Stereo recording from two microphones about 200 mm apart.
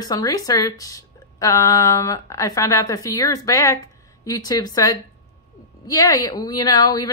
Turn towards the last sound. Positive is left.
turn(degrees=20)  # may be behind; listen again after turning